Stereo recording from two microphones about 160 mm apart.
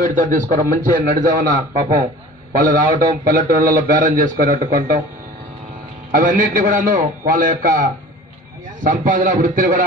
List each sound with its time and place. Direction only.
0.0 s a man's voice: 55° right (ahead or behind)
6.1 s a man's voice: 55° right (ahead or behind)
8.8 s a man's voice: 55° right (ahead or behind)